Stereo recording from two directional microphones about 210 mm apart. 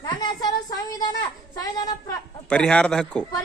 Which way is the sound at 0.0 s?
20° left (ahead or behind).